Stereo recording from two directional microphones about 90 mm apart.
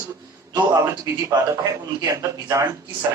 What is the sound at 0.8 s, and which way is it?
A man's voice, 35° right (ahead or behind).